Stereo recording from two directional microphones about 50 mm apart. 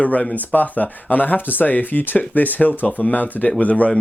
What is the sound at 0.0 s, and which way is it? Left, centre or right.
Speech, left.